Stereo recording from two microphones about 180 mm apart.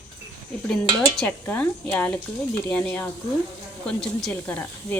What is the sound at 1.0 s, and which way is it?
Speech, 5° left (ahead or behind).